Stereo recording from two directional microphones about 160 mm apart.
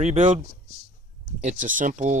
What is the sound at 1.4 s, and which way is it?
Speech, 55° right (ahead or behind).